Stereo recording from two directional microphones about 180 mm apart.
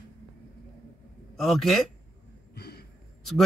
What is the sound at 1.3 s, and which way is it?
Speech, centre (ahead or behind).